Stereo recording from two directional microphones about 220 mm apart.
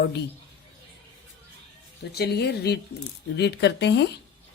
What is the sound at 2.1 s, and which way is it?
Speech, 45° left (ahead or behind).